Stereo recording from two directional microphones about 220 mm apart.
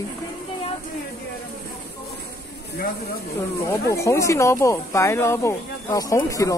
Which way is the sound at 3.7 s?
15° left (ahead or behind).